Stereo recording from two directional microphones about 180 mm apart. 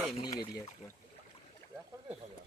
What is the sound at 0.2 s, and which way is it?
Speech, 20° left (ahead or behind).